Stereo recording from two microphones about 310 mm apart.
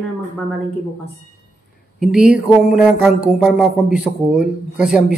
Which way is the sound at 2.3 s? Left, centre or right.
Centre.